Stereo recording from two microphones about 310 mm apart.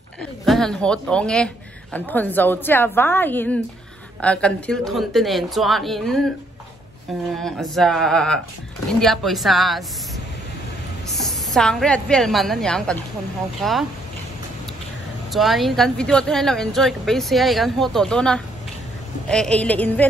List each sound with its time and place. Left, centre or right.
0.2 s speech: centre
7.3 s speech: centre
11.1 s a woman's voice: centre
15.3 s speech: centre